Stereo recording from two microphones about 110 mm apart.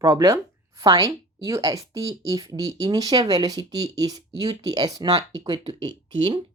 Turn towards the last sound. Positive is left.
turn(degrees=-45)  # may be behind; listen again after turning